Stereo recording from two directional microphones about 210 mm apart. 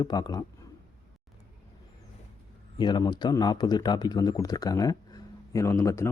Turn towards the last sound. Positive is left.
turn(degrees=15)  # may be behind; listen again after turning